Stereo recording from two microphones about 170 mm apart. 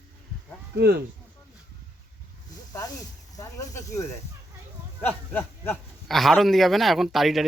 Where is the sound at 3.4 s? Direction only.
20° left (ahead or behind).